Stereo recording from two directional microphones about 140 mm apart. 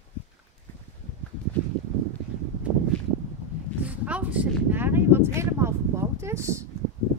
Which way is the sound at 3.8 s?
10° right (ahead or behind).